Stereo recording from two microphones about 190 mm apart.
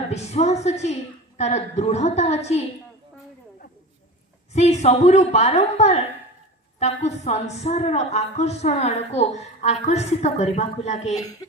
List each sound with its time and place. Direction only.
0.1 s a woman's voice: 35° left (ahead or behind)
4.5 s a woman's voice: 35° left (ahead or behind)
11.2 s a woman's voice: 20° left (ahead or behind)